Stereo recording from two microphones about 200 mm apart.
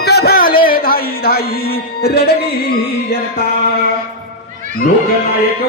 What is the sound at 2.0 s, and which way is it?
Speech, 50° left (ahead or behind).